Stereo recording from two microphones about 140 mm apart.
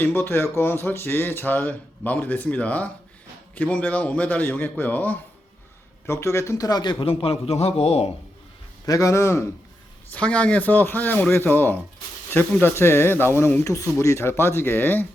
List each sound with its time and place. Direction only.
0.0 s speech: 15° left (ahead or behind)
7.0 s a man's voice: 40° left (ahead or behind)
8.9 s speech: 25° left (ahead or behind)